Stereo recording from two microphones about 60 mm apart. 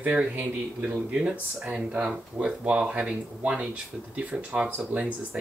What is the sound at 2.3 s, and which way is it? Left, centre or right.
Speech, right.